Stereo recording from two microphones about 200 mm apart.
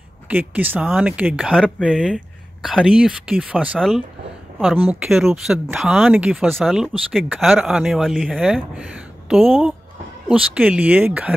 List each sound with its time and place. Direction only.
0.3 s speech: 10° right (ahead or behind)